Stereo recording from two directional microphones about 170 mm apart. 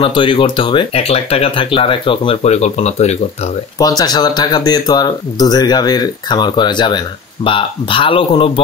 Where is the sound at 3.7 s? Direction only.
20° left (ahead or behind).